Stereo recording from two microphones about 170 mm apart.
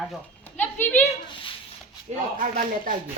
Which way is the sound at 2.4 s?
50° right (ahead or behind).